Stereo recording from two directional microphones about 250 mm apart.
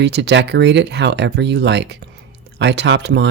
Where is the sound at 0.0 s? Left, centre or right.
Right.